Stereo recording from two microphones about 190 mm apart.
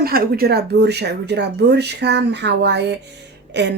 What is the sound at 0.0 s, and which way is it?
Speech, 50° right (ahead or behind).